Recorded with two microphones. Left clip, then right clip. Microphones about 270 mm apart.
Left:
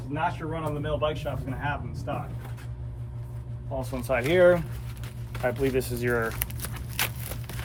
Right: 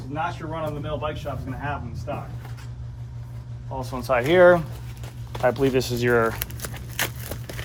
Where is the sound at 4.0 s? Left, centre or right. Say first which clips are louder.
Right 5 dB; centre.